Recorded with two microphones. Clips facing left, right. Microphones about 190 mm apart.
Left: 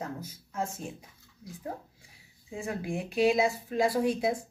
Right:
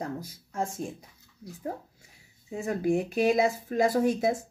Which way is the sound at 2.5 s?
40° right (ahead or behind).